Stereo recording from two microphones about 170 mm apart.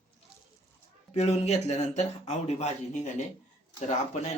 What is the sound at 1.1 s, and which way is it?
Speech, 40° left (ahead or behind).